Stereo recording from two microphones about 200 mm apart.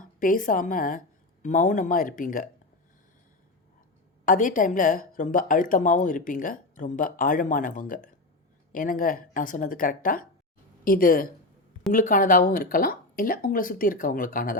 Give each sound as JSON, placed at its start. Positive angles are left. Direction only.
{"t": 0.0, "sound": "a woman's voice", "side_deg": 45}
{"t": 4.3, "sound": "a woman's voice", "side_deg": 40}